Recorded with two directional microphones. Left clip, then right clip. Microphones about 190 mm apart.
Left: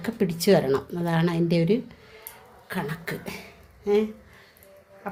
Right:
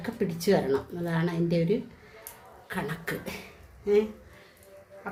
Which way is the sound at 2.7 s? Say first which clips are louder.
Left 2 dB; 20° left (ahead or behind).